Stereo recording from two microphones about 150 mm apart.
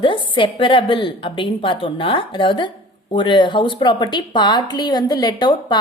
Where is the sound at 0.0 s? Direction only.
35° left (ahead or behind).